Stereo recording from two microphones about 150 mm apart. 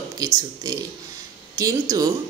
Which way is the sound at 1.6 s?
20° right (ahead or behind).